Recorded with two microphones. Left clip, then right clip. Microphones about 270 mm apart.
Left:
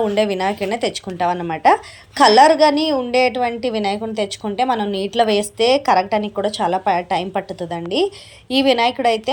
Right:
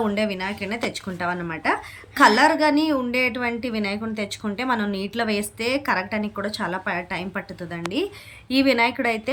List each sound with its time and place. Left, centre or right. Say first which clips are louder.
0.1 s a woman's voice: left 8 dB; centre